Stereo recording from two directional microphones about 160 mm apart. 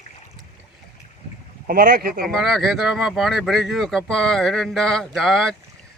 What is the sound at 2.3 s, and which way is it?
Speech, centre (ahead or behind).